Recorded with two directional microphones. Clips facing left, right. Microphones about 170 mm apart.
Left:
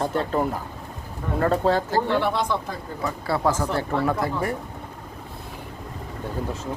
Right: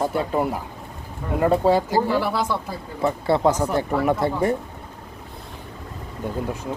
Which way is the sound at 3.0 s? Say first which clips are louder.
Right 5 dB; 25° right (ahead or behind).